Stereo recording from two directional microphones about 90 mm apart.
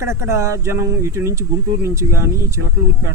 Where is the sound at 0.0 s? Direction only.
30° right (ahead or behind).